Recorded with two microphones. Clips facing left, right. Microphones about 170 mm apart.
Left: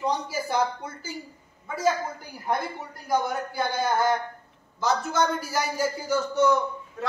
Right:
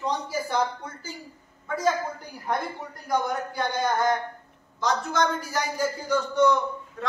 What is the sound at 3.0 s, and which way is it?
A man's voice, 5° left (ahead or behind).